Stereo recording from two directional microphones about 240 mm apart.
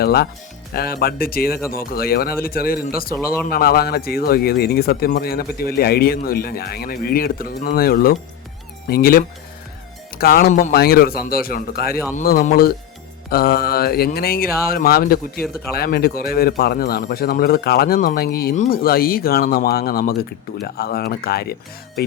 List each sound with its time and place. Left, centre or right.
0.0 s speech: left